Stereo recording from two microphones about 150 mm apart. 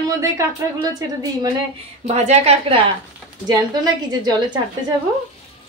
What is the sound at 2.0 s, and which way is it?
Speech, 50° right (ahead or behind).